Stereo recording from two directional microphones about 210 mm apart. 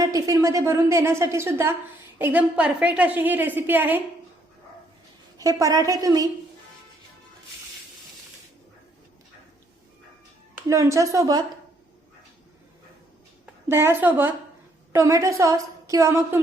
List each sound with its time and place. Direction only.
0.0 s a woman's voice: 15° right (ahead or behind)
5.4 s a woman's voice: 15° right (ahead or behind)
10.7 s a woman's voice: 15° right (ahead or behind)
13.4 s a woman's voice: 10° right (ahead or behind)